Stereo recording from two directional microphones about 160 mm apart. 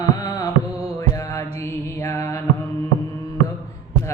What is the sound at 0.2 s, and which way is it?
Music, 20° left (ahead or behind).